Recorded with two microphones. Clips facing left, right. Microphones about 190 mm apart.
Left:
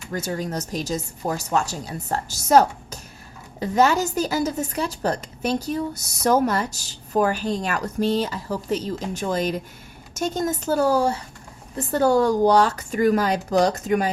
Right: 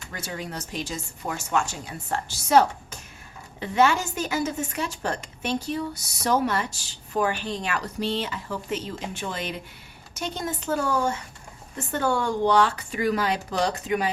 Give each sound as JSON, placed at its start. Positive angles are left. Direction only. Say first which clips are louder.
{"t": 0.1, "sound": "a woman's voice", "louder": "left 7 dB", "side_deg": 40}